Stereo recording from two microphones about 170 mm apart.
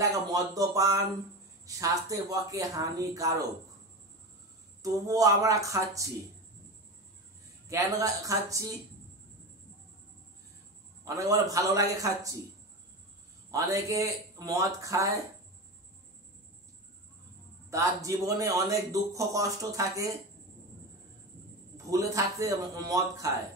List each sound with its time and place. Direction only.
0.0 s speech: 20° right (ahead or behind)
4.8 s speech: 20° right (ahead or behind)
7.6 s speech: 20° right (ahead or behind)
11.1 s speech: 20° right (ahead or behind)
13.5 s speech: 20° right (ahead or behind)
17.6 s speech: 20° right (ahead or behind)
21.7 s speech: 20° right (ahead or behind)